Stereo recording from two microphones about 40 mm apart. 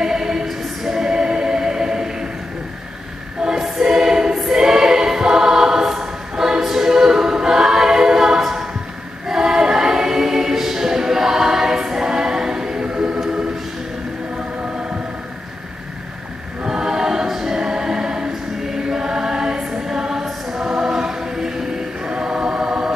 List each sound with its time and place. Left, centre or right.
0.0 s choir: centre
3.4 s music: centre
3.8 s choir: centre
12.8 s music: centre
16.6 s choir: centre